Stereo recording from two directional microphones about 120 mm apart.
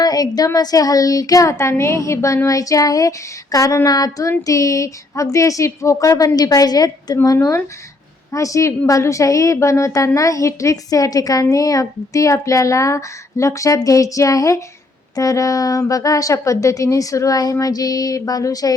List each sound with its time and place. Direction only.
0.0 s speech: 30° left (ahead or behind)
7.2 s speech: 20° left (ahead or behind)